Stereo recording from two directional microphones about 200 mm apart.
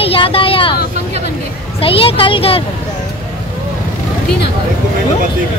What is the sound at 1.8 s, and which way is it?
Speech, 25° left (ahead or behind).